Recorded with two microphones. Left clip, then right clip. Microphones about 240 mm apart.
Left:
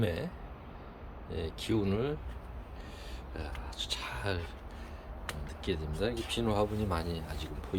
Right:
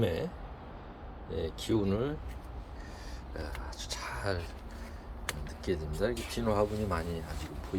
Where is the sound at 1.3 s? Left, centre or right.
Centre.